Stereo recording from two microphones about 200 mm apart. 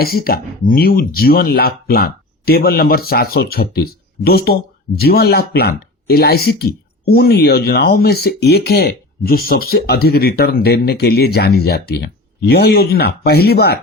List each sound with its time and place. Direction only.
0.0 s speech: 50° left (ahead or behind)